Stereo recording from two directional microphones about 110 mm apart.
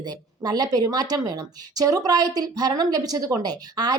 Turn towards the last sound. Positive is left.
turn(degrees=-40)  # may be behind; listen again after turning